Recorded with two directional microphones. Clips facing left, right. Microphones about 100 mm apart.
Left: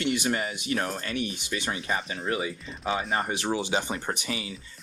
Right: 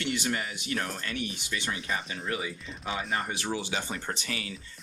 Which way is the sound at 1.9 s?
35° left (ahead or behind).